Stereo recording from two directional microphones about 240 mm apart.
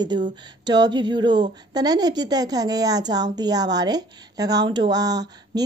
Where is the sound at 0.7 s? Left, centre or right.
Centre.